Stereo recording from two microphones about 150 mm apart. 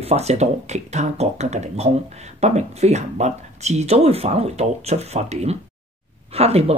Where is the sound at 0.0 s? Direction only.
45° right (ahead or behind).